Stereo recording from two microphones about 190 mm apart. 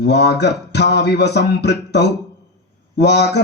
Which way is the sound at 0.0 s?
60° left (ahead or behind).